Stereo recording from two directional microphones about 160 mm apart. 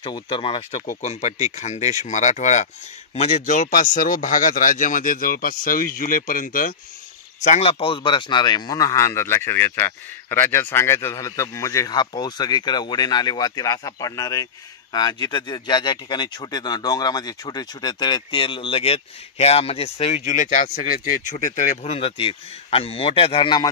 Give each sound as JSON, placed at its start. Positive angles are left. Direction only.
{"t": 0.0, "sound": "speech", "side_deg": 30}
{"t": 0.8, "sound": "speech", "side_deg": 45}
{"t": 7.4, "sound": "speech", "side_deg": 40}